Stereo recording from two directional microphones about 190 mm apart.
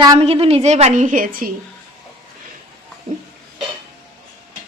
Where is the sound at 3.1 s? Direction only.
35° right (ahead or behind).